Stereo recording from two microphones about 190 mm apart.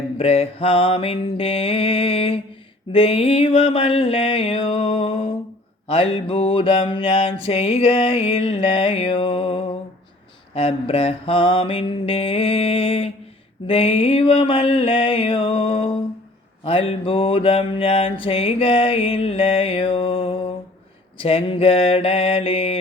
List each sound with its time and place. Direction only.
0.2 s mantra: 30° left (ahead or behind)